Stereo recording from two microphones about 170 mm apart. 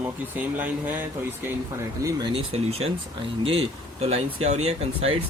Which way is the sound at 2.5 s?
35° right (ahead or behind).